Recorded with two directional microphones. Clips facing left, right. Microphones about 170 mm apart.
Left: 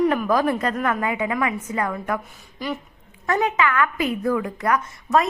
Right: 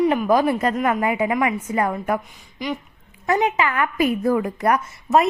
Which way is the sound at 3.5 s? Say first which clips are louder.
Right 1 dB; 30° right (ahead or behind).